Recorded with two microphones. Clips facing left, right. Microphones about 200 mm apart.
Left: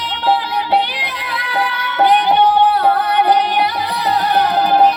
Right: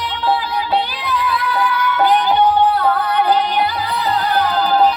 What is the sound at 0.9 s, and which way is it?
Music, 90° left.